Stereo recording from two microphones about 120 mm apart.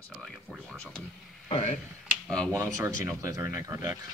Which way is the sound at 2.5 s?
25° right (ahead or behind).